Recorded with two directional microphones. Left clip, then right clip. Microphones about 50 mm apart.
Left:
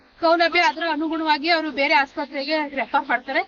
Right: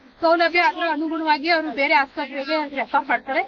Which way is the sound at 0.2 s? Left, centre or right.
Centre.